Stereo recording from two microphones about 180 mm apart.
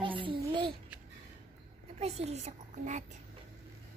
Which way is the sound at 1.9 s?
35° right (ahead or behind).